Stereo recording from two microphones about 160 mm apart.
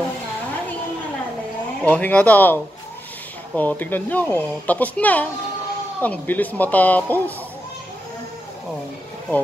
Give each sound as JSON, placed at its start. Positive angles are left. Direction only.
{"t": 1.9, "sound": "speech", "side_deg": 10}